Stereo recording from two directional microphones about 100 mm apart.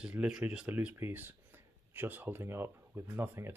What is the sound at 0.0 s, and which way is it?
Speech, 10° right (ahead or behind).